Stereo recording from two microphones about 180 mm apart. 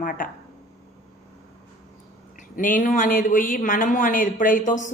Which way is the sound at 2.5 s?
50° left (ahead or behind).